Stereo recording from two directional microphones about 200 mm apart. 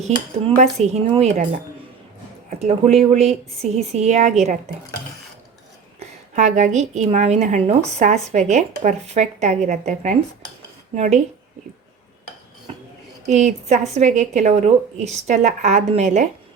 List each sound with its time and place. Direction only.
0.5 s speech: 35° right (ahead or behind)
2.5 s speech: 35° right (ahead or behind)
6.3 s speech: 35° right (ahead or behind)
13.2 s speech: 35° right (ahead or behind)